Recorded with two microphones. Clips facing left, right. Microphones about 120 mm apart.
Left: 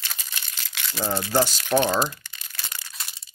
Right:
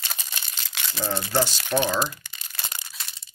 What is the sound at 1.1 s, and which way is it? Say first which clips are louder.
Speech: left 2 dB; 10° left (ahead or behind).